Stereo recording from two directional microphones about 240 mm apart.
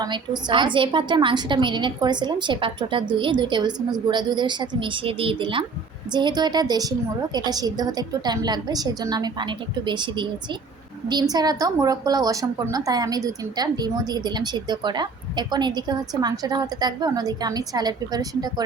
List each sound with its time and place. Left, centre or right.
0.0 s a woman's voice: centre